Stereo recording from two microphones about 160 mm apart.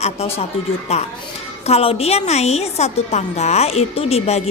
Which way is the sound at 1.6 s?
40° left (ahead or behind).